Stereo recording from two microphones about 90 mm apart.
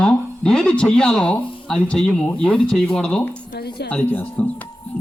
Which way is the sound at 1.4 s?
75° left (ahead or behind).